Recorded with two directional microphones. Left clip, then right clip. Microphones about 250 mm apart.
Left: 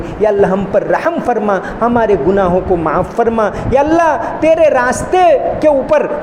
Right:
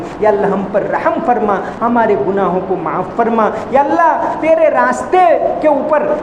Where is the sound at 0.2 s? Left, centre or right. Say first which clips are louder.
Left 1 dB; left.